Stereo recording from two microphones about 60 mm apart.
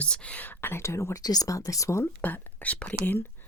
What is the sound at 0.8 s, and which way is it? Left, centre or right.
Speech, left.